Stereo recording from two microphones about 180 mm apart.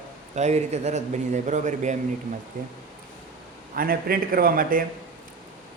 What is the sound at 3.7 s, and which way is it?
A man's voice, 55° right (ahead or behind).